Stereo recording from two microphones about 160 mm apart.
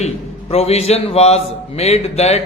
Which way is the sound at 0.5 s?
40° left (ahead or behind).